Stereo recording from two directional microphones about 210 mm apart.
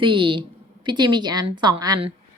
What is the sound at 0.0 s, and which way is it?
A woman's voice, 25° right (ahead or behind).